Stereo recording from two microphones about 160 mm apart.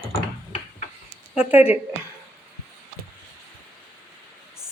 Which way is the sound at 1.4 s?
10° right (ahead or behind).